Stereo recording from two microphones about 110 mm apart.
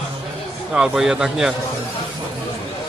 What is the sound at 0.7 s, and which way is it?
Speech, 5° right (ahead or behind).